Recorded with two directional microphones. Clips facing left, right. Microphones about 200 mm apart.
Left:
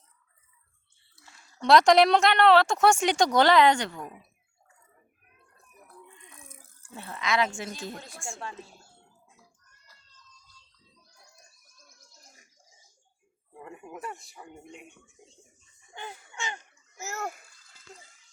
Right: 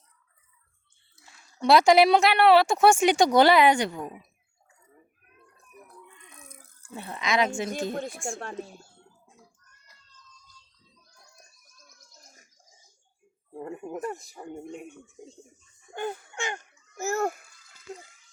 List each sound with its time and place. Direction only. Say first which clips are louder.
1.1 s a woman's voice: even; 15° right (ahead or behind)
6.0 s rattle: even; 30° left (ahead or behind)
6.9 s a woman's voice: right 2 dB; 15° right (ahead or behind)
8.4 s speech: right 4 dB; 55° right (ahead or behind)
13.5 s speech: right 8 dB; 35° right (ahead or behind)
15.9 s speech: right 10 dB; 50° right (ahead or behind)